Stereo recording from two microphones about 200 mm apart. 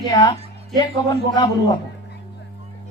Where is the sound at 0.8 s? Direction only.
20° left (ahead or behind).